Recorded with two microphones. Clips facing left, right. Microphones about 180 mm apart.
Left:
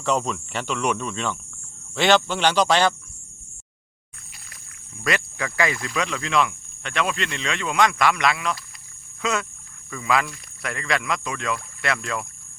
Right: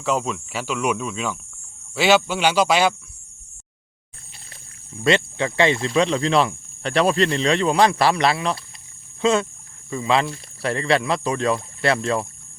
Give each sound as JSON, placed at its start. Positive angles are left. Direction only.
{"t": 0.0, "sound": "speech", "side_deg": -5}
{"t": 5.0, "sound": "speech", "side_deg": -25}